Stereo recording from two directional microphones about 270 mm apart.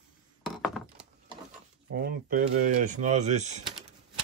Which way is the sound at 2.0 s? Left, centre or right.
Right.